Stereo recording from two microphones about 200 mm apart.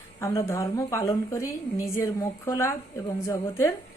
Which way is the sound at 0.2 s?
15° left (ahead or behind).